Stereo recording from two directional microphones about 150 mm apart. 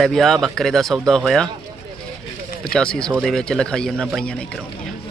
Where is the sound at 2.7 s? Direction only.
5° left (ahead or behind).